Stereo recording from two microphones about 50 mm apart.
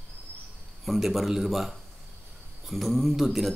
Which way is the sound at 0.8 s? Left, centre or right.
Centre.